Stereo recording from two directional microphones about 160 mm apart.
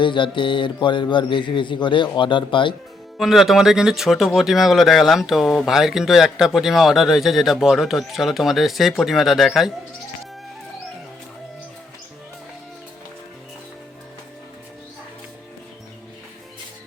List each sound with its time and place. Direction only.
0.0 s speech: 30° left (ahead or behind)
3.2 s speech: centre (ahead or behind)